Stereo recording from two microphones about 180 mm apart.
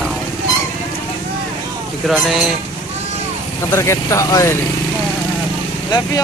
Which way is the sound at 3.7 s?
15° left (ahead or behind).